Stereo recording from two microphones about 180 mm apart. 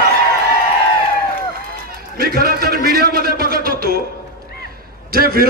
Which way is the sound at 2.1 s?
55° right (ahead or behind).